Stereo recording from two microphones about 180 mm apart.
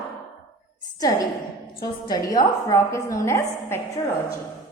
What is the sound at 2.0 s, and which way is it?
A woman's voice, 20° left (ahead or behind).